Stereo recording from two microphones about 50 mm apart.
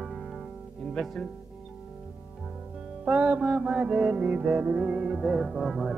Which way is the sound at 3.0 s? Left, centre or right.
Right.